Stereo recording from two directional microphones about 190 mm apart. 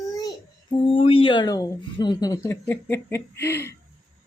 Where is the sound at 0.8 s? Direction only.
30° left (ahead or behind); by 3.7 s 15° left (ahead or behind).